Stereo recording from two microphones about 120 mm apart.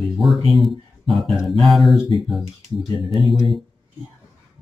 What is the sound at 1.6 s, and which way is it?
Music, centre (ahead or behind).